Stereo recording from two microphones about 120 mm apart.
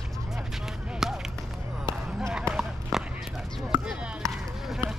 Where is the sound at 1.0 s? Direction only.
5° right (ahead or behind).